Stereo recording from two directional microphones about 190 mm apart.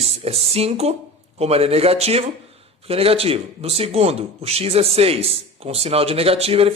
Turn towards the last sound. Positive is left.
turn(degrees=-30)  # may be behind; listen again after turning